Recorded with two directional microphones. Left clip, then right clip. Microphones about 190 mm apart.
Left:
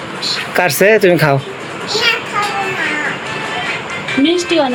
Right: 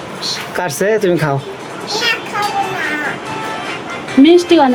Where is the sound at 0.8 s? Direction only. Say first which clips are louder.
Left 4 dB; 15° left (ahead or behind).